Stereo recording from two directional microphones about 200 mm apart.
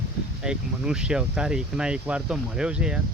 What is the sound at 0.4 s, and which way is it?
Speech, 5° right (ahead or behind).